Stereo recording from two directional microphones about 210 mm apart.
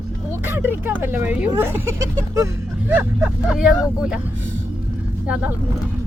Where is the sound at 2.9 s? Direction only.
5° right (ahead or behind).